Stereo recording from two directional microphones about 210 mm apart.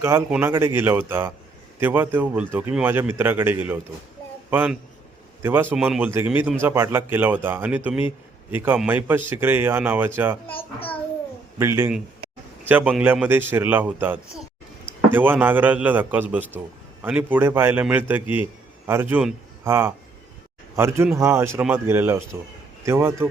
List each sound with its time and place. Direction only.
0.0 s a man's voice: 10° right (ahead or behind)
10.5 s a child's voice: 25° left (ahead or behind)
11.6 s a man's voice: 10° right (ahead or behind)